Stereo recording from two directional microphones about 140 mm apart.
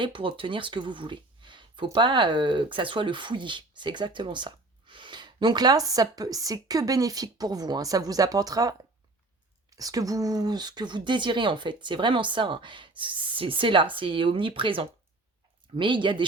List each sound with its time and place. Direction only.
0.0 s speech: 40° right (ahead or behind)